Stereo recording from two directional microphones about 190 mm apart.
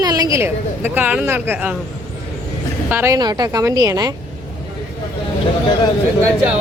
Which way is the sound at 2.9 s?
10° right (ahead or behind).